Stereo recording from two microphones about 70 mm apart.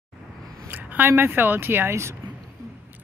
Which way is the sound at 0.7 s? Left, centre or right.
Right.